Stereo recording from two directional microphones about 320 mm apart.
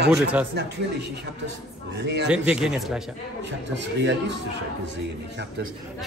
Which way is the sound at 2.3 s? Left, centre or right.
Centre.